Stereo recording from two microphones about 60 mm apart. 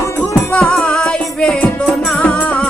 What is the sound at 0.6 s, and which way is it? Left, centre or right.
Music, centre.